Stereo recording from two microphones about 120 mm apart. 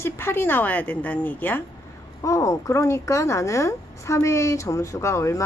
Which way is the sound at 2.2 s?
25° left (ahead or behind).